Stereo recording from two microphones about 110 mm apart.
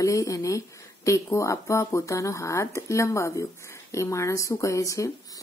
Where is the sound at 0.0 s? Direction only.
30° left (ahead or behind).